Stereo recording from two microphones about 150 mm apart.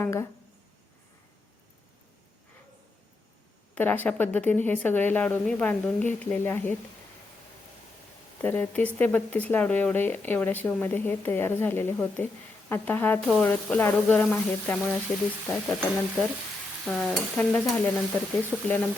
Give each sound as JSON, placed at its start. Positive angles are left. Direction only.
{"t": 0.0, "sound": "speech", "side_deg": 20}
{"t": 3.8, "sound": "speech", "side_deg": 10}
{"t": 8.4, "sound": "speech", "side_deg": 10}
{"t": 15.4, "sound": "stir", "side_deg": 0}
{"t": 18.5, "sound": "stir", "side_deg": -5}